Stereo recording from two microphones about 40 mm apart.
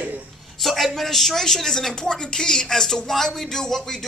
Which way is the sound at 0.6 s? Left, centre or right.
Centre.